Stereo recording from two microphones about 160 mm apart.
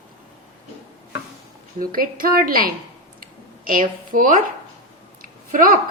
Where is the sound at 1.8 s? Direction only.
65° right (ahead or behind).